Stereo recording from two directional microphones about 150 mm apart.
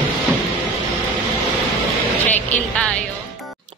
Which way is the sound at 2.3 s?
10° left (ahead or behind).